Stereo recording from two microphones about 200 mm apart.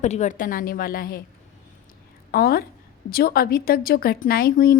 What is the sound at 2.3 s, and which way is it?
A woman's voice, 50° left (ahead or behind).